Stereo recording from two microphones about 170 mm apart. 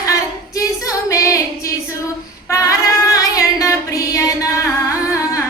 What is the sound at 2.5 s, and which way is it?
Singing, 20° left (ahead or behind).